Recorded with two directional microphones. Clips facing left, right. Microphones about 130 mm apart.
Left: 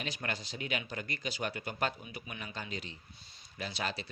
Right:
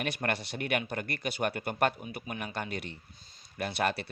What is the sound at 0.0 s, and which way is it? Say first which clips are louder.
Speech: right 6 dB; 60° right (ahead or behind).